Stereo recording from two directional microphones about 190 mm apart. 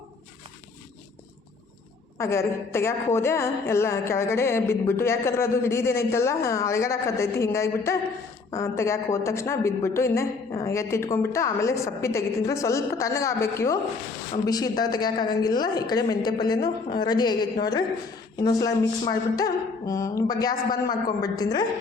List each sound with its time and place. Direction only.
2.1 s a woman's voice: 15° left (ahead or behind)